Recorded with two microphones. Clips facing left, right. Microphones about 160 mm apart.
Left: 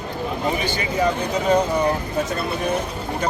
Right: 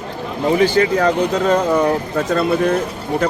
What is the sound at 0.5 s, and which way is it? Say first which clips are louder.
Speech: right 9 dB; 90° right.